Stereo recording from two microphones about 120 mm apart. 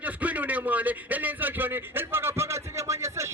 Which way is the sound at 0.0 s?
10° right (ahead or behind).